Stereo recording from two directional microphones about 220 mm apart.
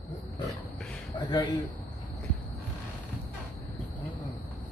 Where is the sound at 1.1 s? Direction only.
20° left (ahead or behind).